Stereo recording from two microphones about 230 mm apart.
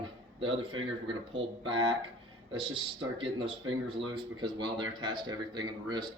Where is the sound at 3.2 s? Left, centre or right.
Right.